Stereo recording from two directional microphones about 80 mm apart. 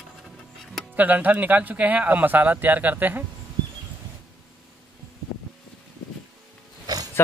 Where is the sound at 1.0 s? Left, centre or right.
Right.